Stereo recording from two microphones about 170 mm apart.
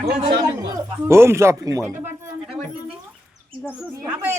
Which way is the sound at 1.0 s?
15° right (ahead or behind).